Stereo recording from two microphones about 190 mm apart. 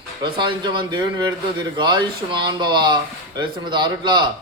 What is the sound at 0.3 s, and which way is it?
Speech, 25° right (ahead or behind).